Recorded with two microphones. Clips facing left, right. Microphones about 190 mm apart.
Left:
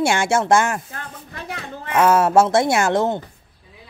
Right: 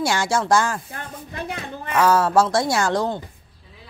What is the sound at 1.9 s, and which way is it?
Speech, 25° left (ahead or behind).